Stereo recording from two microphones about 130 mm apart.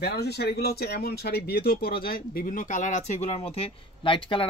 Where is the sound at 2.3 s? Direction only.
90° left.